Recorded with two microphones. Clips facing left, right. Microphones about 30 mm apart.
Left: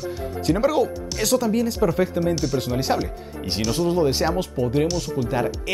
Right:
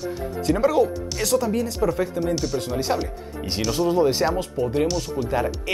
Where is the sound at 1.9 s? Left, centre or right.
Centre.